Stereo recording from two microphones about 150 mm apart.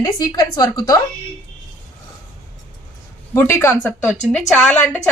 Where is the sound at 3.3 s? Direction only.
15° left (ahead or behind).